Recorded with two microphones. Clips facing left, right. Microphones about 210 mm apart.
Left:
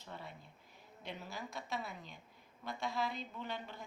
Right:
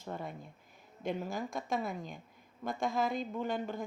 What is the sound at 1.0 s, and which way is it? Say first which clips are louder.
A woman's voice: right 10 dB; 50° right (ahead or behind).